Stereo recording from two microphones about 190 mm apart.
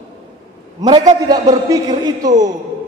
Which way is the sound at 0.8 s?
20° right (ahead or behind).